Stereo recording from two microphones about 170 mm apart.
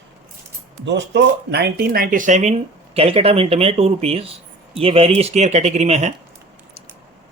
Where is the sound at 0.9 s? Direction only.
90° right; by 6.1 s 40° right (ahead or behind).